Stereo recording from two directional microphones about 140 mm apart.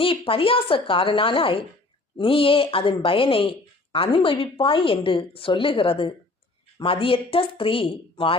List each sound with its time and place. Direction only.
0.0 s a woman's voice: 40° left (ahead or behind)